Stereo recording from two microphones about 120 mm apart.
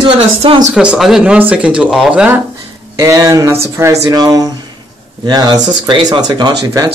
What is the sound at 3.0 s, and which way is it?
Speech, 30° right (ahead or behind).